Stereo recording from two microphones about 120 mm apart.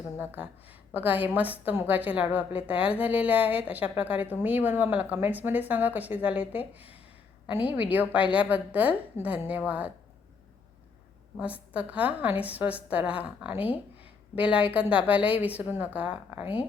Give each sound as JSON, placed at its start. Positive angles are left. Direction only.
{"t": 0.2, "sound": "a woman's voice", "side_deg": -15}
{"t": 11.3, "sound": "a woman's voice", "side_deg": -10}